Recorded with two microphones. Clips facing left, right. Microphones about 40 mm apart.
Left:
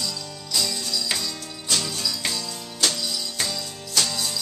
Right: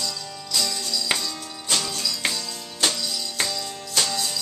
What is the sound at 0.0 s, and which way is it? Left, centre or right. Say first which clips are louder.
Music: even; centre.